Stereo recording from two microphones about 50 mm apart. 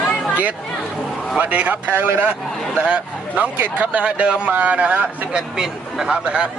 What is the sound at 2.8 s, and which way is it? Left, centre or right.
Speech, right.